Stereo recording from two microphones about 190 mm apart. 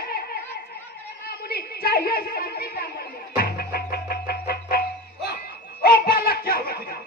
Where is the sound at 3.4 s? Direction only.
55° left (ahead or behind).